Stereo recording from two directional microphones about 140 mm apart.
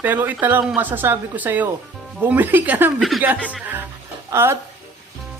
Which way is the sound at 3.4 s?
10° right (ahead or behind).